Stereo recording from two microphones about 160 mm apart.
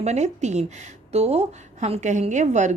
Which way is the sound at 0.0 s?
45° right (ahead or behind).